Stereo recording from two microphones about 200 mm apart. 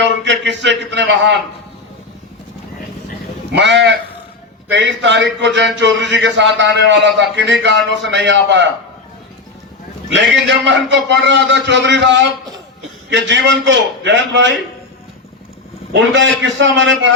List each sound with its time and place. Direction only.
0.0 s a man's voice: 65° right (ahead or behind)
3.6 s a man's voice: 65° right (ahead or behind)
5.2 s a man's voice: 65° right (ahead or behind)
10.1 s a man's voice: 65° right (ahead or behind)
15.9 s a man's voice: 65° right (ahead or behind)